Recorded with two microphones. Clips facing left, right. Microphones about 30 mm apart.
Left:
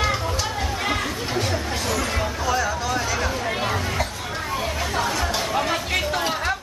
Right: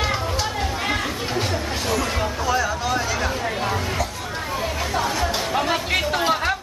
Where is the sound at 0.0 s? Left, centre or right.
Centre.